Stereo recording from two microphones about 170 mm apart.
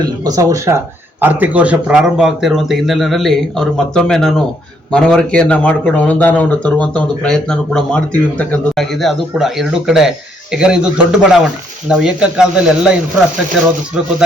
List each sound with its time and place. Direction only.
0.0 s speech: 20° right (ahead or behind)